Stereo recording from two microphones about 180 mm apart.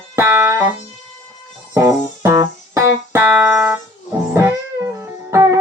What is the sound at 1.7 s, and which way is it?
Music, 15° right (ahead or behind).